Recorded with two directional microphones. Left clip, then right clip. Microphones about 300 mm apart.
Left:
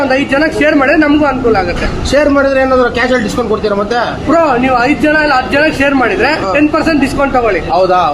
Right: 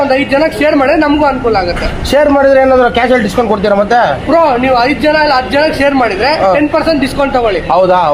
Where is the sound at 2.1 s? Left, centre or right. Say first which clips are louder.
Right 3 dB; right.